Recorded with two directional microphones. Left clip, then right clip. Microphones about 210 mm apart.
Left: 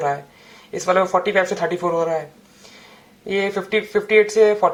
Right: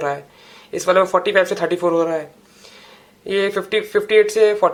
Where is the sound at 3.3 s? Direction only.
35° right (ahead or behind).